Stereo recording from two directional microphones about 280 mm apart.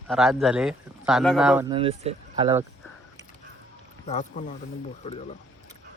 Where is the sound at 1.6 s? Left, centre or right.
Centre.